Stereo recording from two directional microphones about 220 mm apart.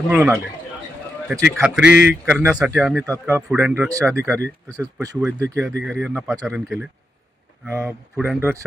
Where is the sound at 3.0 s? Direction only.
15° right (ahead or behind).